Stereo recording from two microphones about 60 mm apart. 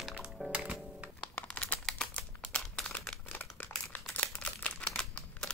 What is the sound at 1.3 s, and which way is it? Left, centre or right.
Crumpling, left.